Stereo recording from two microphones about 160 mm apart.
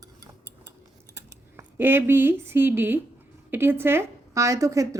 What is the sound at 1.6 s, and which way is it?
A woman's voice, 15° right (ahead or behind).